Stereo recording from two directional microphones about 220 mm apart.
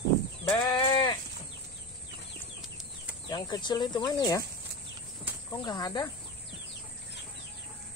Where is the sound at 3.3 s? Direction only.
20° left (ahead or behind).